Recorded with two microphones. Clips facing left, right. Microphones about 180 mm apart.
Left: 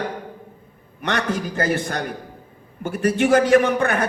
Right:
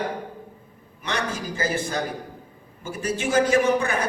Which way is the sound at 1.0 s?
60° left (ahead or behind).